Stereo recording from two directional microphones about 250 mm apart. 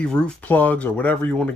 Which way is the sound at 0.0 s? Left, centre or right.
Centre.